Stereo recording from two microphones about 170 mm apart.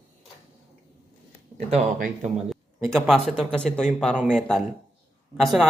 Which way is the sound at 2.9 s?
Centre (ahead or behind).